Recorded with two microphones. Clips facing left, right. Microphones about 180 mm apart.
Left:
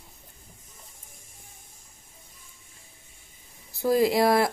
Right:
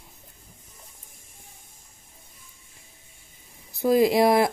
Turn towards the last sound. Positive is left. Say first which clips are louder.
# right 2 dB
turn(degrees=-20)  # may be behind; listen again after turning